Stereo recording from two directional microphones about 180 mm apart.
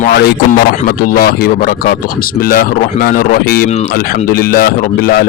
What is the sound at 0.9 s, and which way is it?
Speech, 55° left (ahead or behind).